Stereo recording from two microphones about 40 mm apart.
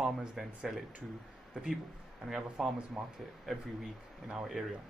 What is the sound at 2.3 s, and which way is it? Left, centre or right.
Speech, centre.